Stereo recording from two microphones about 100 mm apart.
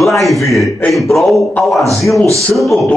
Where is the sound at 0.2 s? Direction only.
Centre (ahead or behind).